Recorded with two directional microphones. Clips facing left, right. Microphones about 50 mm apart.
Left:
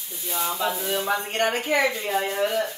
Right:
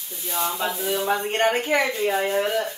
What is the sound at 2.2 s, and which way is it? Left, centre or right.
Speech, centre.